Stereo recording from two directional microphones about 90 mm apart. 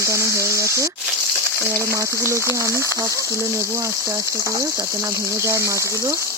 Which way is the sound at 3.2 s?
35° right (ahead or behind).